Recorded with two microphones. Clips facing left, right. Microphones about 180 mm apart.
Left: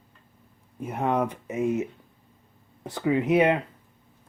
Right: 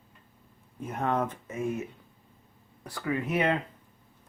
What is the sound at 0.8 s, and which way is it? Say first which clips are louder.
Speech: left 4 dB; 10° left (ahead or behind).